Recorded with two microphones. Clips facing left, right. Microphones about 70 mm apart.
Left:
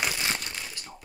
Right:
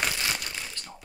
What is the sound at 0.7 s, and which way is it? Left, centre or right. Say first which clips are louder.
Fusillade: even; centre.